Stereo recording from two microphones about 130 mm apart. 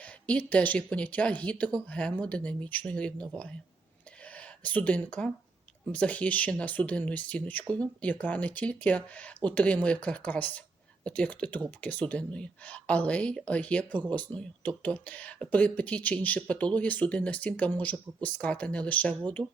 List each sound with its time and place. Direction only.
0.0 s speech: 10° left (ahead or behind)
4.3 s speech: 10° left (ahead or behind)
19.4 s speech: 35° right (ahead or behind)